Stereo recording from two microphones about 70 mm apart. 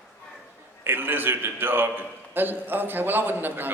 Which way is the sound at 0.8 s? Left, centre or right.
Right.